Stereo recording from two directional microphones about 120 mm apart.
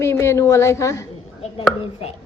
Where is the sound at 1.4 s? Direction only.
50° left (ahead or behind).